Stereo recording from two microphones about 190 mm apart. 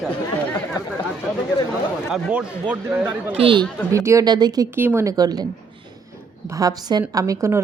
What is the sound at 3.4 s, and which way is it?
Speech, 25° right (ahead or behind).